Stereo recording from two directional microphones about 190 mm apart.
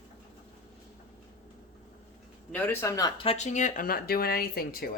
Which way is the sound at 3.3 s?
35° left (ahead or behind).